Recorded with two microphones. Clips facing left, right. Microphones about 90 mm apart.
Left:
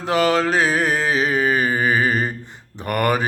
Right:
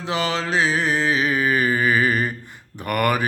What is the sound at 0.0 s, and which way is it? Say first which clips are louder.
Mantra: left 6 dB; 45° left (ahead or behind).